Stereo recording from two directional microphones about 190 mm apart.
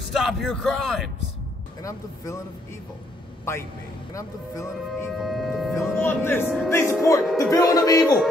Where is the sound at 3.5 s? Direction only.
15° left (ahead or behind).